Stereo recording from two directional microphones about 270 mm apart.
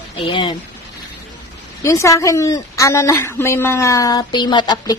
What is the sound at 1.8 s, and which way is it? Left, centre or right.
A woman's voice, centre.